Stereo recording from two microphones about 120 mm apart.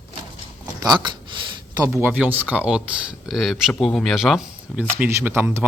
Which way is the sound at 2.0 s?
15° right (ahead or behind).